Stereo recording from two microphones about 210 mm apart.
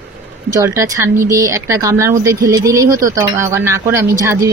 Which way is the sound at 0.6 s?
15° right (ahead or behind).